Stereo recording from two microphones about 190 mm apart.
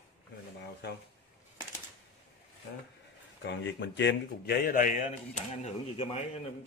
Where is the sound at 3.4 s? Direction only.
65° left (ahead or behind); by 5.0 s 45° left (ahead or behind).